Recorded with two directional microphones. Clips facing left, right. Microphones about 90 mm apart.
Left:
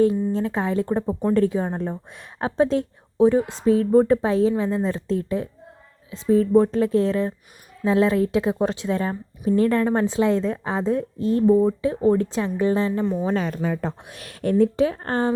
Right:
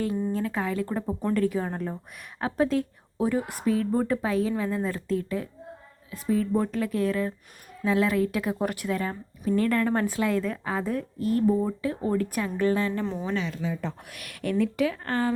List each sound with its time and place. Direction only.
0.3 s a woman's voice: 25° left (ahead or behind)
13.2 s speech: 45° left (ahead or behind)
14.1 s speech: 30° left (ahead or behind)